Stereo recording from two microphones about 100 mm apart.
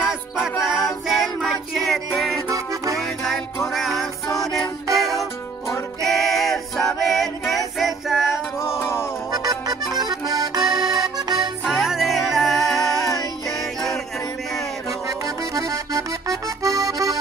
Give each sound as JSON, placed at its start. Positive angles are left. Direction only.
{"t": 0.4, "sound": "music", "side_deg": -5}
{"t": 2.5, "sound": "music", "side_deg": -35}
{"t": 3.0, "sound": "music", "side_deg": 5}
{"t": 6.0, "sound": "choir", "side_deg": 0}
{"t": 8.3, "sound": "music", "side_deg": 25}
{"t": 9.3, "sound": "music", "side_deg": -40}
{"t": 9.9, "sound": "accordion", "side_deg": -40}
{"t": 11.6, "sound": "music", "side_deg": -5}
{"t": 13.0, "sound": "music", "side_deg": 35}
{"t": 13.5, "sound": "music", "side_deg": 5}
{"t": 15.0, "sound": "accordion", "side_deg": -35}